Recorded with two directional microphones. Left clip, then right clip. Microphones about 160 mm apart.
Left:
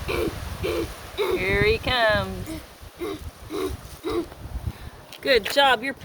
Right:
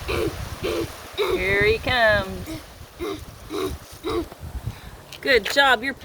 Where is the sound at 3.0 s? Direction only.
20° left (ahead or behind).